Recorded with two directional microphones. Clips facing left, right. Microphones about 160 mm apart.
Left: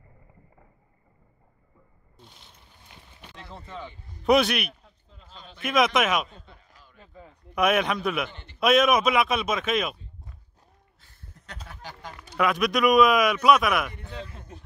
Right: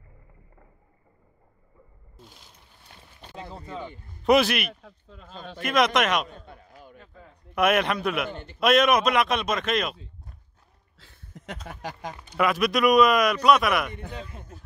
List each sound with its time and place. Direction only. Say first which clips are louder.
2.1 s mechanisms: right 2 dB; centre (ahead or behind)
3.4 s speech: right 2 dB; 10° right (ahead or behind)
4.2 s speech: right 1 dB; centre (ahead or behind)
4.8 s a sound: right 7 dB; 75° right (ahead or behind)
5.6 s speech: even; centre (ahead or behind)
6.2 s a sound: right 5 dB; 55° right (ahead or behind)
7.5 s speech: right 1 dB; centre (ahead or behind)
8.3 s a man's voice: right 11 dB; 50° right (ahead or behind)
8.5 s speech: even; centre (ahead or behind)
11.0 s a sound: right 8 dB; 90° right
12.4 s speech: right 1 dB; centre (ahead or behind)